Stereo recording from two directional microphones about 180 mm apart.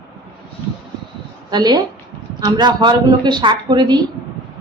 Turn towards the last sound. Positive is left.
turn(degrees=-25)  # may be behind; listen again after turning